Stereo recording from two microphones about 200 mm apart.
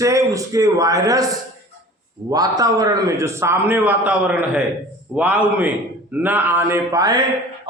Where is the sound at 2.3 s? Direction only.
20° right (ahead or behind).